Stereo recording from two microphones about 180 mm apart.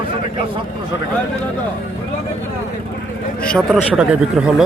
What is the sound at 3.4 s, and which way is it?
Speech, 5° left (ahead or behind).